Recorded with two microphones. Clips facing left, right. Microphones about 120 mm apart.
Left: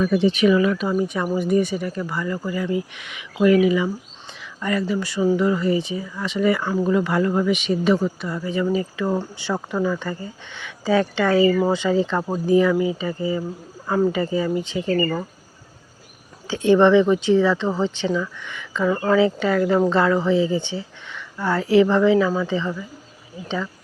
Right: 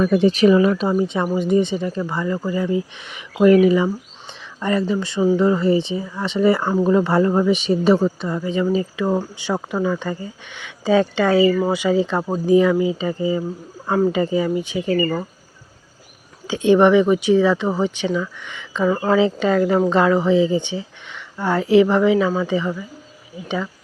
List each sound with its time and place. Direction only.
0.0 s speech: 50° right (ahead or behind)
0.3 s speech: 35° right (ahead or behind); by 15.3 s 10° right (ahead or behind)
16.5 s speech: 15° right (ahead or behind)